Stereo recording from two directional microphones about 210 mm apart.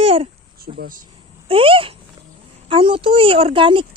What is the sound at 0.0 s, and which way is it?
Babbling, 25° right (ahead or behind).